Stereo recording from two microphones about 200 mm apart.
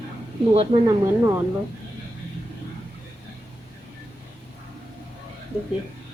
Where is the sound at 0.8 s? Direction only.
15° right (ahead or behind).